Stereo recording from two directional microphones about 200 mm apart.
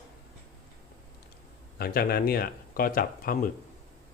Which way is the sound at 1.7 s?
50° left (ahead or behind).